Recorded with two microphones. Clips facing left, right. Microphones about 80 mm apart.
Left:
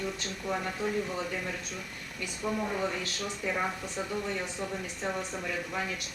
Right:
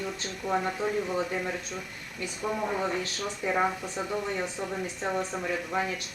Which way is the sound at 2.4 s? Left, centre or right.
Right.